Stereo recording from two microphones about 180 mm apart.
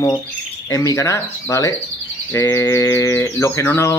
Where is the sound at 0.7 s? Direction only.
15° left (ahead or behind).